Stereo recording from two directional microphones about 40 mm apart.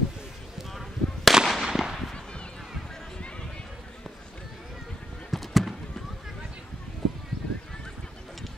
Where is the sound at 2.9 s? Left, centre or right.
Centre.